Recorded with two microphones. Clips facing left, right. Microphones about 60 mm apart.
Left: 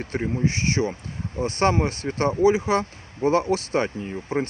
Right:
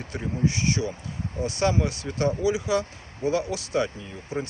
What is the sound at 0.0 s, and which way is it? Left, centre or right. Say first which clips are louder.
Speech: left 3 dB; left.